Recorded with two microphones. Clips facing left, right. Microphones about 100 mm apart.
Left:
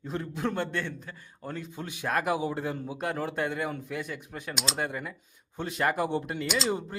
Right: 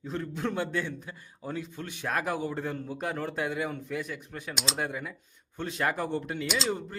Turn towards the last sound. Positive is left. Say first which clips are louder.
# left 1 dB
turn(degrees=0)  # may be behind; listen again after turning